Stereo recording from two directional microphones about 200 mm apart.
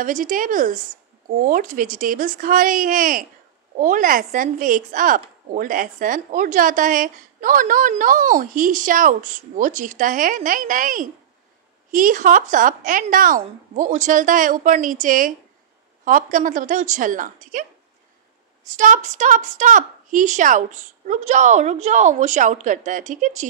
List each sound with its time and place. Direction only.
0.0 s a woman's voice: 40° right (ahead or behind)
18.8 s a woman's voice: 40° right (ahead or behind)